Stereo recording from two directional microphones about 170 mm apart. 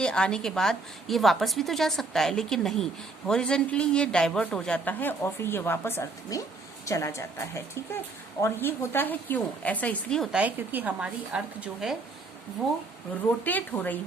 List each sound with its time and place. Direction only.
0.0 s a woman's voice: 5° left (ahead or behind)
10.3 s a woman's voice: 10° right (ahead or behind); by 14.0 s 10° left (ahead or behind)